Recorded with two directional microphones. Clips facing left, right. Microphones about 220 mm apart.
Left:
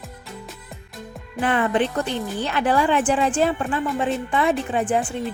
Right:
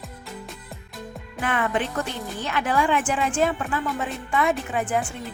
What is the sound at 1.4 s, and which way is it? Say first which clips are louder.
Speech: left 5 dB; 30° left (ahead or behind).